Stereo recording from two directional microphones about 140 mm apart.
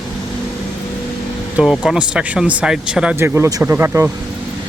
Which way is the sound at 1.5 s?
Centre (ahead or behind).